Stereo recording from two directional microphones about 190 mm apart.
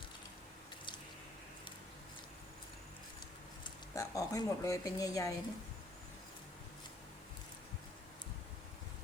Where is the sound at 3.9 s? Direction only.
15° left (ahead or behind).